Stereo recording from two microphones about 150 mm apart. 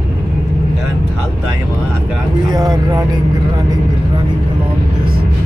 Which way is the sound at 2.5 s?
25° right (ahead or behind).